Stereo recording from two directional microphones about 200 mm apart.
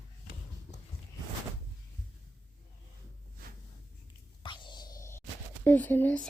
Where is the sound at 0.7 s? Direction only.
10° left (ahead or behind).